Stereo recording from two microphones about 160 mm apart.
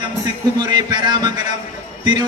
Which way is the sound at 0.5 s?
25° right (ahead or behind).